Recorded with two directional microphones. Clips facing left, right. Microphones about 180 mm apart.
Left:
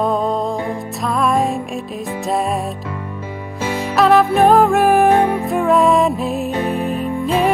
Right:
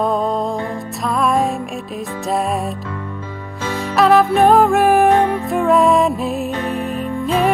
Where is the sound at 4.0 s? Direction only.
Centre (ahead or behind).